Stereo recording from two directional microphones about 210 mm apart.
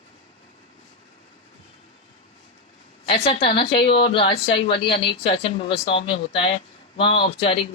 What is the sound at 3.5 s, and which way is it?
A woman's voice, 25° left (ahead or behind).